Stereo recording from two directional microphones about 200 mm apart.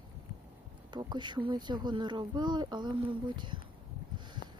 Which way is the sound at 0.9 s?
20° right (ahead or behind).